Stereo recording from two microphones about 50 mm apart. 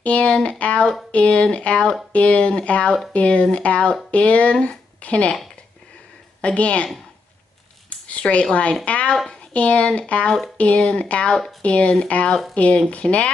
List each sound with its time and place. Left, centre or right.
0.0 s speech: left
6.4 s speech: left
8.1 s speech: left